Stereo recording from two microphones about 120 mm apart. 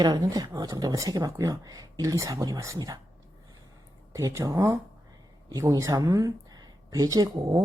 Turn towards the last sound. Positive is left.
turn(degrees=-30)  # may be behind; listen again after turning